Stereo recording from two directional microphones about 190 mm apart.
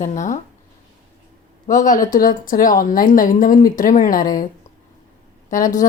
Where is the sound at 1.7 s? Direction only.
45° left (ahead or behind).